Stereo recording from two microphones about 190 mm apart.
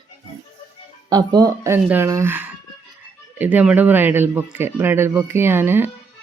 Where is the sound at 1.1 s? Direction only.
20° right (ahead or behind).